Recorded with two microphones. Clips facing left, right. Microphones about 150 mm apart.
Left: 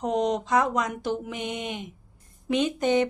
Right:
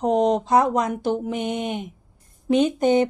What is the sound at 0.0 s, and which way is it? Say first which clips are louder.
Speech: right 6 dB; 50° right (ahead or behind).